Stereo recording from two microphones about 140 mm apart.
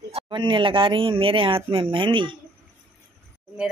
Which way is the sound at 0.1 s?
35° right (ahead or behind).